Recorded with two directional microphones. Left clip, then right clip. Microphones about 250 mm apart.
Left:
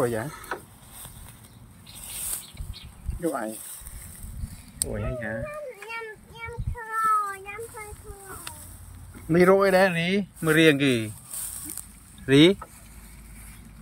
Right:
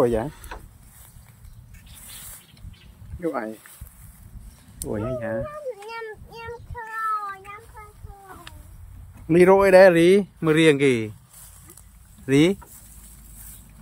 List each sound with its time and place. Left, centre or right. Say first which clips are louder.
0.0 s speech: right 5 dB; centre
3.2 s speech: right 1 dB; centre
4.7 s a sound: right 4 dB; centre
9.3 s speech: right 5 dB; centre
12.3 s speech: left 1 dB; centre